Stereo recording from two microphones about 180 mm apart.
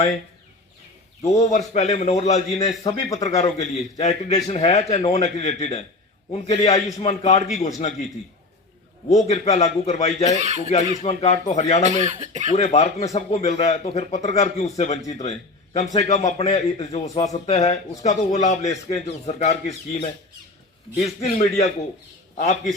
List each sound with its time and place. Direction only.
1.4 s a man's voice: 40° left (ahead or behind)
2.8 s speech: 20° left (ahead or behind)
3.6 s a man's voice: 40° left (ahead or behind)
9.0 s a man's voice: 40° left (ahead or behind)
10.3 s speech: 40° right (ahead or behind)
11.0 s a man's voice: 35° left (ahead or behind)
11.8 s speech: 40° right (ahead or behind)
12.5 s a man's voice: 35° left (ahead or behind)